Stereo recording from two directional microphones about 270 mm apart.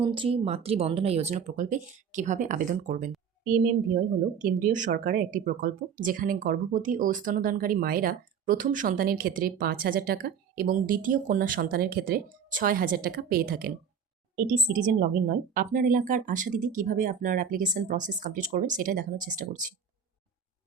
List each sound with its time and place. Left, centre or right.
0.0 s a woman's voice: centre